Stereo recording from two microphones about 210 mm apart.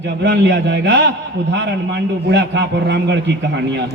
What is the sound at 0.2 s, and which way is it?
A man's voice, 55° right (ahead or behind).